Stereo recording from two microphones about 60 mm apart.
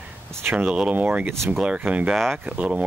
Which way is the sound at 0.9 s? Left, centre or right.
Right.